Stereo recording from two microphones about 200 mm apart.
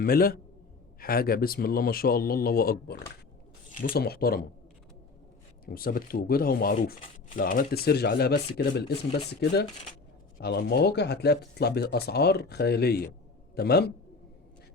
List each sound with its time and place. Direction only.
0.0 s speech: 50° left (ahead or behind)
5.6 s speech: 45° left (ahead or behind)